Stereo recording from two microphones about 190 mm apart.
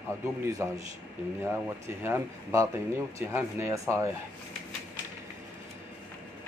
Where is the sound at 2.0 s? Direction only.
15° right (ahead or behind).